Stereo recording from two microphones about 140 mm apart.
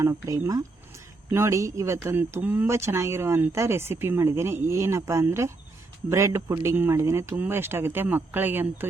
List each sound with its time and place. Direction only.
0.0 s speech: 20° right (ahead or behind)